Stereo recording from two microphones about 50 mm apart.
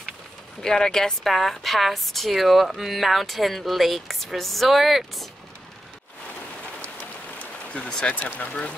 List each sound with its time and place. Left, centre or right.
0.6 s speech: centre
1.2 s speech: centre
7.7 s speech: left